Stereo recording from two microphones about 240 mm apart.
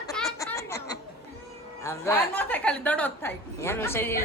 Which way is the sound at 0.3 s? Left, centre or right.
Centre.